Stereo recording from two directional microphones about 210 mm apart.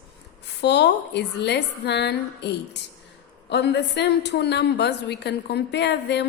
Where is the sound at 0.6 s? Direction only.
55° left (ahead or behind).